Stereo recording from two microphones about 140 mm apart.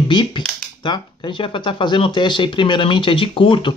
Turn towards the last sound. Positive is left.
turn(degrees=35)  # may be behind; listen again after turning